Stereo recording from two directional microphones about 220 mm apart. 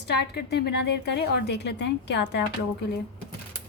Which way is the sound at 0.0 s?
50° left (ahead or behind).